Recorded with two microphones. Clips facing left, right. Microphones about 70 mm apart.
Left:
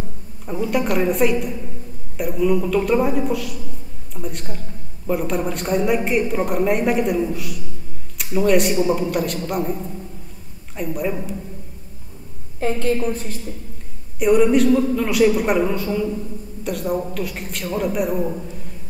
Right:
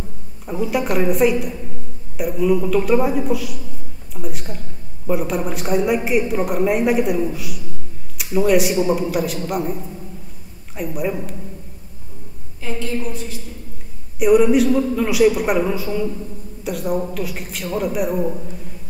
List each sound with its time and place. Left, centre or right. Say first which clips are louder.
0.5 s a woman's voice: even; centre
10.8 s a woman's voice: even; centre
12.5 s a woman's voice: left 5 dB; left
14.2 s a woman's voice: right 1 dB; centre